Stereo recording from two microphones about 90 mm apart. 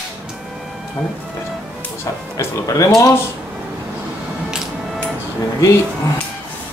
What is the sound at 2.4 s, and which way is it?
Speech, 35° left (ahead or behind).